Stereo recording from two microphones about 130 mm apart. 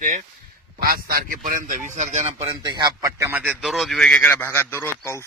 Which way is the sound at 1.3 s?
85° right.